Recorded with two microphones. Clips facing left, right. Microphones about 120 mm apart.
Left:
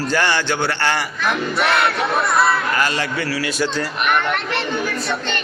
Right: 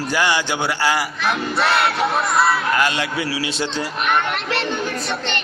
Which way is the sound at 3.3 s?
20° right (ahead or behind).